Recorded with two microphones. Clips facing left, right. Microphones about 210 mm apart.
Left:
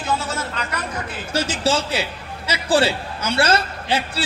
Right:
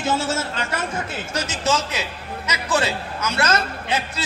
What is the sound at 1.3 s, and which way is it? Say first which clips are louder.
A man's voice: left 3 dB; 30° left (ahead or behind).